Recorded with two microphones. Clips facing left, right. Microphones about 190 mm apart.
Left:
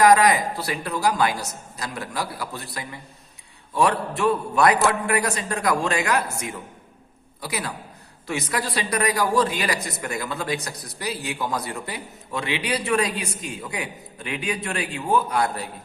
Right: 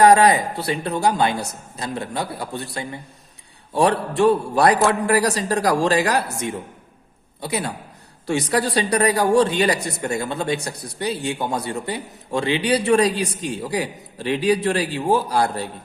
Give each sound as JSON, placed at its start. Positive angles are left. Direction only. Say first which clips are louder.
{"t": 0.0, "sound": "a man's voice", "louder": "right 3 dB", "side_deg": -30}
{"t": 4.2, "sound": "a man's voice", "louder": "right 4 dB", "side_deg": -30}
{"t": 7.4, "sound": "a man's voice", "louder": "right 4 dB", "side_deg": -30}